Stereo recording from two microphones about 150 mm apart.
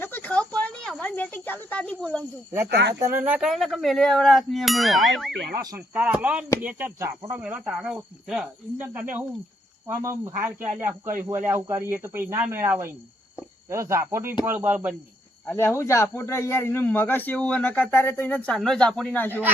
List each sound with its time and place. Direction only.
0.0 s cricket: 10° left (ahead or behind)
2.9 s speech: 15° right (ahead or behind)
15.4 s a man's voice: 15° left (ahead or behind)